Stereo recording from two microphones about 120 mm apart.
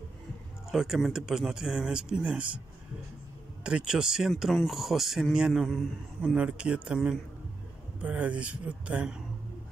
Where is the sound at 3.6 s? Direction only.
10° right (ahead or behind).